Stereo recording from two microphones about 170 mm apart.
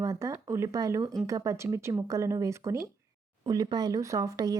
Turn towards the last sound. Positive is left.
turn(degrees=-20)  # may be behind; listen again after turning